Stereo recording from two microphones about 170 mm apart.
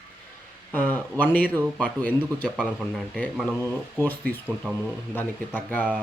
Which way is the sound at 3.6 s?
10° left (ahead or behind).